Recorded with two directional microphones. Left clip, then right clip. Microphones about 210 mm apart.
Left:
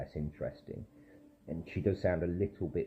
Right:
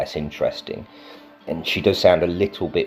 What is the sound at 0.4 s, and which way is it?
Speech, 65° right (ahead or behind).